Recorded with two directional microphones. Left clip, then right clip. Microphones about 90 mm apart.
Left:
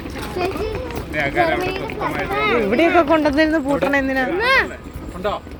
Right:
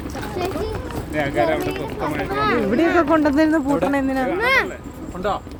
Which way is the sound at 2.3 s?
5° right (ahead or behind).